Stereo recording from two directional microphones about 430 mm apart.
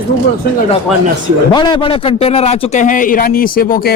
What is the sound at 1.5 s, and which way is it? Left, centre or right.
A man's voice, centre.